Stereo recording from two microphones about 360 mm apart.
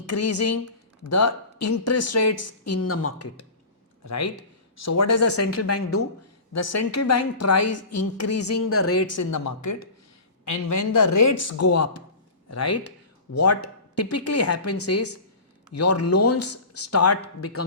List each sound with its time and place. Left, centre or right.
0.0 s a woman's voice: left